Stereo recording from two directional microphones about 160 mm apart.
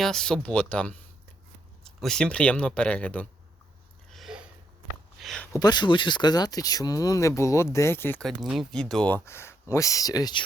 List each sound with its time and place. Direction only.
0.0 s speech: 5° left (ahead or behind)
4.1 s a sound: centre (ahead or behind)
5.5 s speech: 25° left (ahead or behind)
8.3 s speech: centre (ahead or behind); by 10.4 s 25° left (ahead or behind)